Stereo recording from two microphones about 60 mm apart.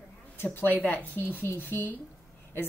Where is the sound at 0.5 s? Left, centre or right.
Left.